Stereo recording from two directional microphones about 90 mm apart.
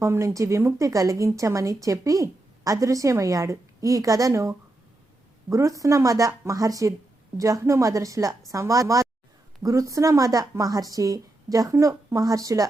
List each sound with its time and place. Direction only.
0.0 s a woman's voice: 30° right (ahead or behind)